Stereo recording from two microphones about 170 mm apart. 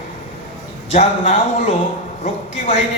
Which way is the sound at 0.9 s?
40° left (ahead or behind).